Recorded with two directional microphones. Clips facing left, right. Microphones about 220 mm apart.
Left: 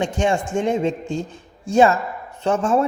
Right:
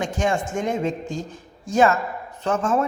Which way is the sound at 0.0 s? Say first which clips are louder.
Left 3 dB; 30° left (ahead or behind).